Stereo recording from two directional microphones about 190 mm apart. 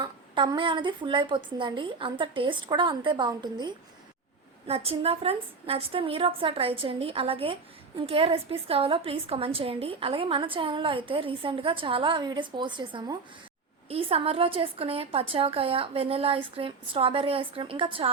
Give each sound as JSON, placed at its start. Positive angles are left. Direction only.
{"t": 0.0, "sound": "a woman's voice", "side_deg": -25}